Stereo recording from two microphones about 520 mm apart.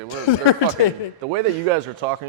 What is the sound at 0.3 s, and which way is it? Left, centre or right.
Speech, left.